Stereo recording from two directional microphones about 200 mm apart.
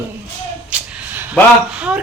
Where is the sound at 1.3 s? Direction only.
5° right (ahead or behind).